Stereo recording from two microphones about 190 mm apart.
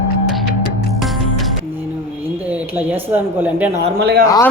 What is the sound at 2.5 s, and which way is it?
Speech, 10° right (ahead or behind).